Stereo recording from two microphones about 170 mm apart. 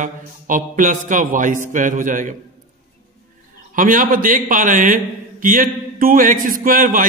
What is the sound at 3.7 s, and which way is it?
A man's voice, 50° right (ahead or behind).